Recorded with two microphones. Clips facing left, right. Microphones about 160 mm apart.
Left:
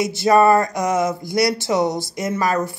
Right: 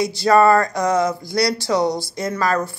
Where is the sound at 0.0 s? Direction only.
20° left (ahead or behind).